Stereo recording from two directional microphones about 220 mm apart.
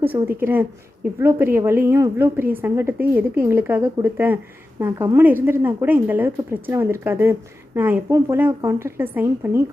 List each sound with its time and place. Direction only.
0.0 s a woman's voice: 10° right (ahead or behind)